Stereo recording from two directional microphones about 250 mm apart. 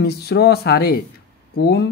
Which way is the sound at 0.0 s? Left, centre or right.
Left.